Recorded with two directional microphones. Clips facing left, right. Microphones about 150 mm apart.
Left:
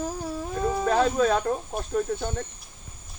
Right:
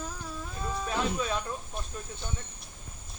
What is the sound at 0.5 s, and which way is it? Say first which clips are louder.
Speech: left 10 dB; 55° left (ahead or behind).